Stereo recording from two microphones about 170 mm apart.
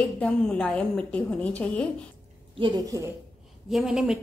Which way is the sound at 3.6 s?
5° right (ahead or behind).